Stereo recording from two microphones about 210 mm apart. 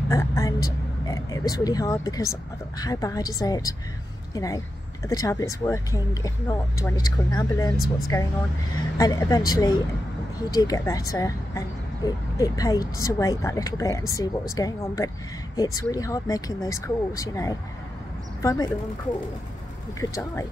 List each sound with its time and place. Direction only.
0.1 s vehicle: 15° left (ahead or behind)
1.5 s speech: 15° left (ahead or behind)
20.0 s speech: 15° left (ahead or behind)